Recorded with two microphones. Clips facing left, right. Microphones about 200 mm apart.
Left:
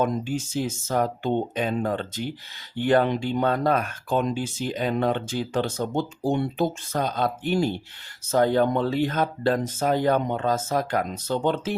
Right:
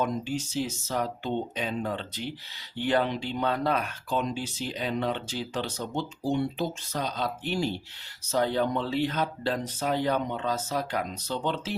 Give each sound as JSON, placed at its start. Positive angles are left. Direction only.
{"t": 0.0, "sound": "speech", "side_deg": 50}